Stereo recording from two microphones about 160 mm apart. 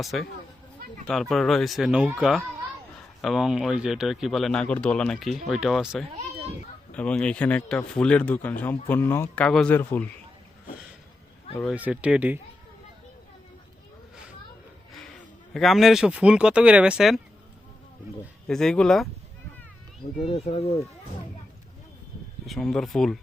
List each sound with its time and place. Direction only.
0.0 s a man's voice: centre (ahead or behind)
11.7 s speech: 10° right (ahead or behind)
15.5 s speech: centre (ahead or behind)
18.4 s speech: 5° left (ahead or behind)
20.2 s speech: 40° left (ahead or behind)
22.4 s speech: centre (ahead or behind)